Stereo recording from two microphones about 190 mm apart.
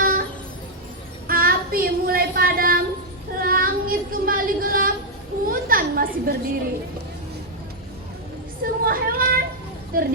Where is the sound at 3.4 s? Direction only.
50° right (ahead or behind).